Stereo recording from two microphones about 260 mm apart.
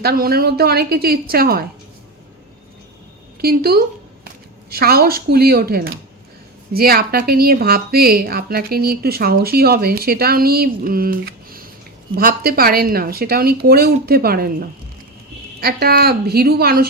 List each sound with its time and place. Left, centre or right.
0.0 s speech: right
3.4 s speech: right